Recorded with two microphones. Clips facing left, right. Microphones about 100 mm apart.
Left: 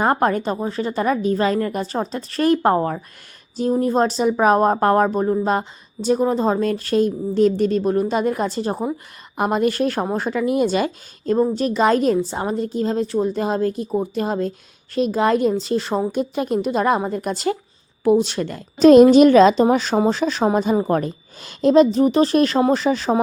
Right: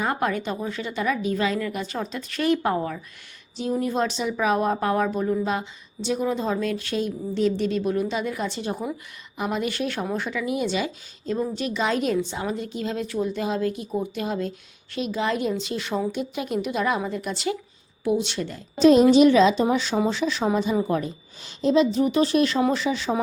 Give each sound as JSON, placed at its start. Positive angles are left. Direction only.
{"t": 0.0, "sound": "speech", "side_deg": 45}
{"t": 20.9, "sound": "speech", "side_deg": 50}
{"t": 21.8, "sound": "speech", "side_deg": 40}